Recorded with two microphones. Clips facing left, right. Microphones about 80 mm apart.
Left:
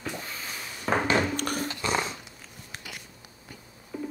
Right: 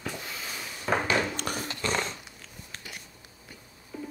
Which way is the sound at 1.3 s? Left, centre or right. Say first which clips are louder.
Left 3 dB; left.